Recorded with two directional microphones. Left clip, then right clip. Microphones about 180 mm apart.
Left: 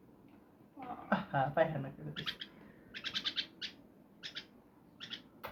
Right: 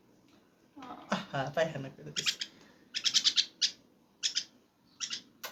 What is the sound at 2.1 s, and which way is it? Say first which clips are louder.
Speech: right 9 dB; 30° right (ahead or behind).